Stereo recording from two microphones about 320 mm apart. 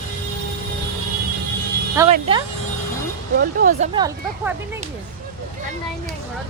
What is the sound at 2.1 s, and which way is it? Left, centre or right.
Speech, centre.